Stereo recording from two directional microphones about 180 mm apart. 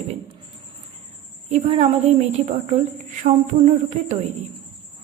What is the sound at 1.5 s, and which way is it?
Speech, 40° right (ahead or behind).